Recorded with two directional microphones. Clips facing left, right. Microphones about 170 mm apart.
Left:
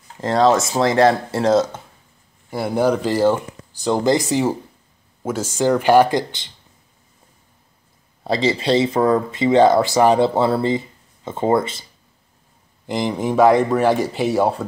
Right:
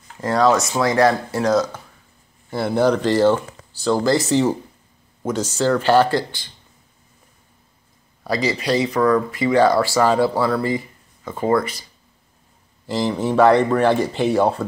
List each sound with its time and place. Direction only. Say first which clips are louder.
0.2 s speech: left 1 dB; 25° left (ahead or behind)
2.5 s speech: right 1 dB; 10° left (ahead or behind)
8.2 s speech: left 2 dB; 25° left (ahead or behind)
12.8 s speech: even; 15° left (ahead or behind)